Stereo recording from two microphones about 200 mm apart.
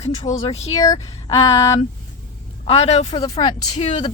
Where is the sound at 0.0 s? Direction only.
30° left (ahead or behind).